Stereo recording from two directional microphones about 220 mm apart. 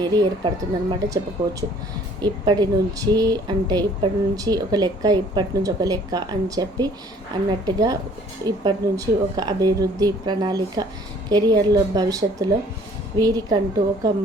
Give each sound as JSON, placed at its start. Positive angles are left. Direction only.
{"t": 0.0, "sound": "a woman's voice", "side_deg": -20}
{"t": 2.2, "sound": "speech", "side_deg": -20}